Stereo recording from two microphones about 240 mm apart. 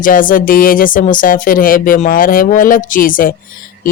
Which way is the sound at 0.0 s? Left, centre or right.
Left.